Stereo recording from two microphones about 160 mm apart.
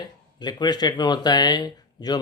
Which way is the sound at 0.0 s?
25° left (ahead or behind).